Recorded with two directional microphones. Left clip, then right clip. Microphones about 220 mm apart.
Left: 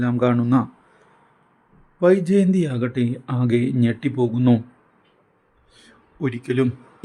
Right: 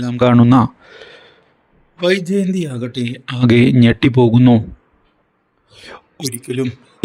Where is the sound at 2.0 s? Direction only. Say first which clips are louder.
Right 1 dB; 40° right (ahead or behind).